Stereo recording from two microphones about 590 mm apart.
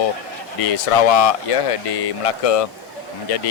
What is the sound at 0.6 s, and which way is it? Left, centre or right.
Speech, left.